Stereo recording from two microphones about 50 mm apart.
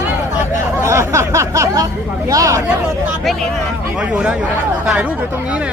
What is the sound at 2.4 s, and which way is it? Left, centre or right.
Speech, right.